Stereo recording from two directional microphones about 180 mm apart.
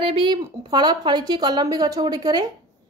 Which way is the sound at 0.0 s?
30° right (ahead or behind).